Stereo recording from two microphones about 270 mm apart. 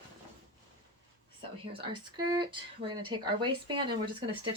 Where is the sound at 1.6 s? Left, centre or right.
Centre.